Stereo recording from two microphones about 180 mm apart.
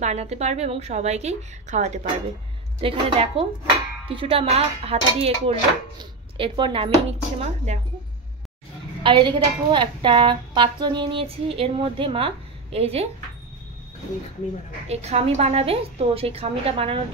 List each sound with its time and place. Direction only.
0.0 s a woman's voice: 40° right (ahead or behind)
9.0 s a woman's voice: 25° right (ahead or behind)
14.9 s speech: 35° right (ahead or behind)